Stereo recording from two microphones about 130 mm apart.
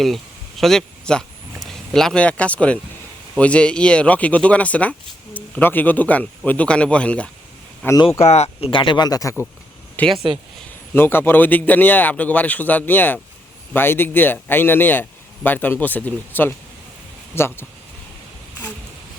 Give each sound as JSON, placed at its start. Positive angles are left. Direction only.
{"t": 0.0, "sound": "speech", "side_deg": 0}
{"t": 8.2, "sound": "speech", "side_deg": 55}
{"t": 8.7, "sound": "speech", "side_deg": 40}
{"t": 10.0, "sound": "speech", "side_deg": 15}